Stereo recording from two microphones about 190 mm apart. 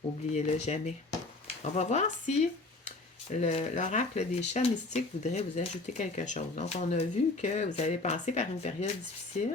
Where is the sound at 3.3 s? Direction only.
35° left (ahead or behind).